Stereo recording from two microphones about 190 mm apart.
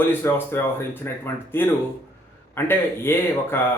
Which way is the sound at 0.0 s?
10° left (ahead or behind).